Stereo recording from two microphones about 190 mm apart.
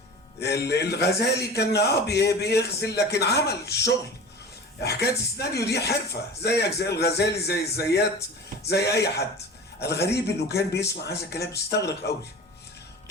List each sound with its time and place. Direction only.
0.3 s a man's voice: 60° left (ahead or behind)